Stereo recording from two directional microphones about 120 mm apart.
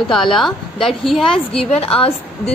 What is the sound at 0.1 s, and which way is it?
A woman's voice, 5° left (ahead or behind).